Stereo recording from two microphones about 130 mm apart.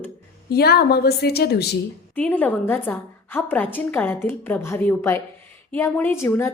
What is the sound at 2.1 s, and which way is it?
A woman's voice, 15° left (ahead or behind).